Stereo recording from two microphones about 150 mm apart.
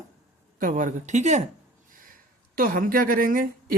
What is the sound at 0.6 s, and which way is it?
Speech, 60° right (ahead or behind).